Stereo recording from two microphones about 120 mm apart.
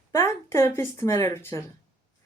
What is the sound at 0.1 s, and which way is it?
A woman's voice, 25° left (ahead or behind).